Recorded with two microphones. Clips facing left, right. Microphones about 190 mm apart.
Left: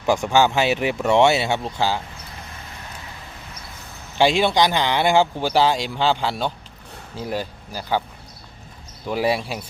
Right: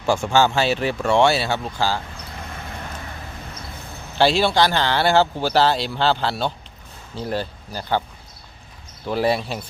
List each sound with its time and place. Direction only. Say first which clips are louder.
0.0 s speech: even; 15° left (ahead or behind)
4.2 s speech: even; 15° left (ahead or behind)
9.0 s speech: right 1 dB; 10° left (ahead or behind)